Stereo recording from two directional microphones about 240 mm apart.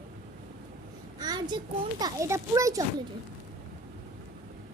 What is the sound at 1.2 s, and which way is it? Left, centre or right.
A child's voice, centre.